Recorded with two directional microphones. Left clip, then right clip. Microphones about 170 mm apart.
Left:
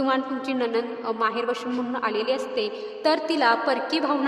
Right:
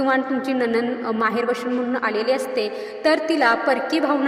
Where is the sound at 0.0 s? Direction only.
10° right (ahead or behind).